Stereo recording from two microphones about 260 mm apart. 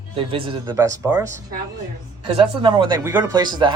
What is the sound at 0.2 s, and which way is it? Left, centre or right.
Speech, centre.